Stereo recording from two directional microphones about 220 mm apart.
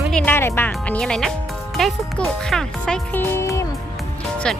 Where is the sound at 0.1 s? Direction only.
5° left (ahead or behind).